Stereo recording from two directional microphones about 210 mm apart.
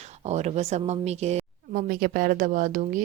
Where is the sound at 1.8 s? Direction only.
45° right (ahead or behind).